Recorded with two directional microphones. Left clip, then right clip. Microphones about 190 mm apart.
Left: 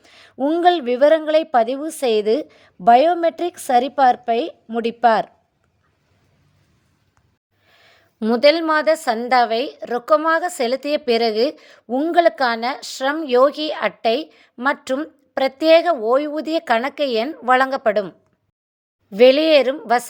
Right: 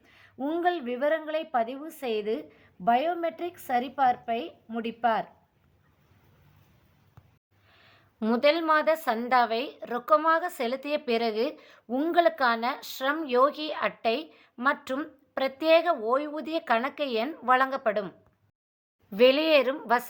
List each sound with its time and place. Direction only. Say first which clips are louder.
0.0 s a woman's voice: left 12 dB; 45° left (ahead or behind)
7.7 s a woman's voice: left 6 dB; 30° left (ahead or behind)
19.1 s a woman's voice: left 9 dB; 25° left (ahead or behind)